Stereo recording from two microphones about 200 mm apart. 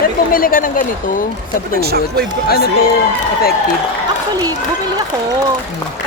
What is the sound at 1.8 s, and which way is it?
Speech, 50° right (ahead or behind).